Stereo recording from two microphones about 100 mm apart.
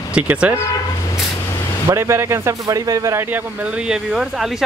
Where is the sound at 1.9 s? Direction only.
25° right (ahead or behind).